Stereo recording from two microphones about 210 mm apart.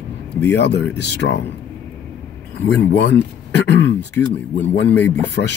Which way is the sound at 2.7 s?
55° left (ahead or behind).